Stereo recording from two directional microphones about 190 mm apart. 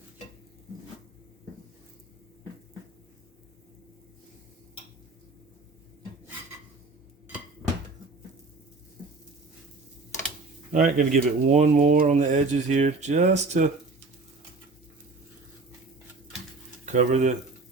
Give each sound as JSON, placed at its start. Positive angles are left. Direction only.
{"t": 10.7, "sound": "speech", "side_deg": -40}
{"t": 16.8, "sound": "speech", "side_deg": -40}